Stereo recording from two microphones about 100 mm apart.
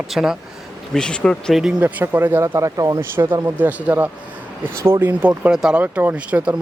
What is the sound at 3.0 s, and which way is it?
Speech, 20° right (ahead or behind).